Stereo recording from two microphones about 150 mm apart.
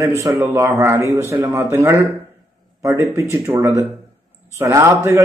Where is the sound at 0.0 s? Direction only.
20° right (ahead or behind).